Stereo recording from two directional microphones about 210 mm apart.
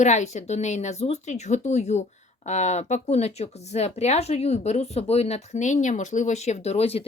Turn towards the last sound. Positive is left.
turn(degrees=30)  # may be behind; listen again after turning